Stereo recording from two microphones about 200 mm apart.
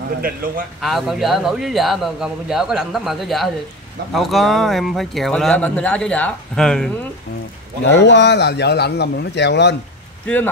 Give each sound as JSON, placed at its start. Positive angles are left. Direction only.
{"t": 0.7, "sound": "speech", "side_deg": 0}
{"t": 8.0, "sound": "a man's voice", "side_deg": 60}
{"t": 10.2, "sound": "speech", "side_deg": 10}